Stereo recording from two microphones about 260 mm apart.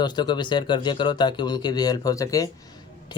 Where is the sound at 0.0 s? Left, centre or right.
Centre.